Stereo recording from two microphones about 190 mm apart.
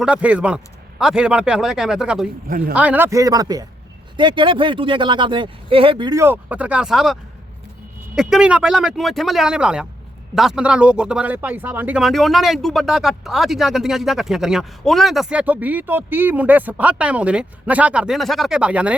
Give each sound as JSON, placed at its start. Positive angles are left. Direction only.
{"t": 0.0, "sound": "speech", "side_deg": -5}
{"t": 2.5, "sound": "speech", "side_deg": -50}
{"t": 2.7, "sound": "a man's voice", "side_deg": -10}